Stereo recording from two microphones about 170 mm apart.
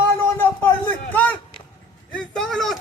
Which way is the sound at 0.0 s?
15° left (ahead or behind).